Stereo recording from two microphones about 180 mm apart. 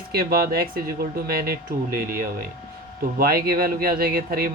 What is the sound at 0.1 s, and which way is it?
Speech, 60° right (ahead or behind).